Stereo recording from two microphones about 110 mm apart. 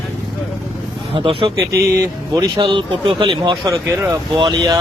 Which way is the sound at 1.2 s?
50° right (ahead or behind).